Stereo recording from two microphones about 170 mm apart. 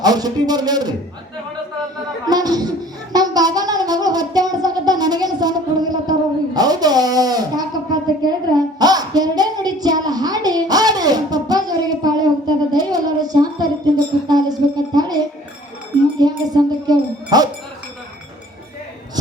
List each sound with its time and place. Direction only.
0.0 s speech: 25° right (ahead or behind)
2.2 s a sound: 20° right (ahead or behind)
16.1 s music: 25° right (ahead or behind)